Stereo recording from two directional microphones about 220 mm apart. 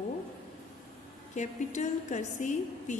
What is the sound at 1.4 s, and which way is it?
A woman's voice, 35° left (ahead or behind).